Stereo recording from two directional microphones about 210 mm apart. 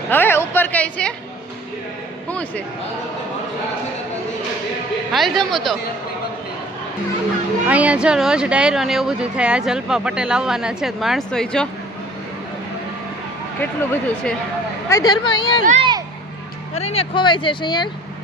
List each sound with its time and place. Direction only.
0.1 s a woman's voice: 10° left (ahead or behind)
5.1 s speech: centre (ahead or behind)
7.7 s speech: 5° right (ahead or behind)
13.6 s speech: 5° left (ahead or behind)
15.6 s speech: 35° right (ahead or behind)
16.7 s speech: 30° left (ahead or behind)